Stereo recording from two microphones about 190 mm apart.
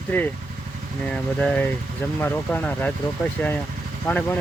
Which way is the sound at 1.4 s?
5° left (ahead or behind).